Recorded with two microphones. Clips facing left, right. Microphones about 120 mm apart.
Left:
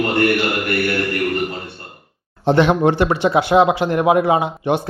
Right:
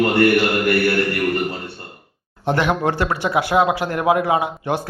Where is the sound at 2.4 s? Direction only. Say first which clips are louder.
Left 5 dB; 25° left (ahead or behind).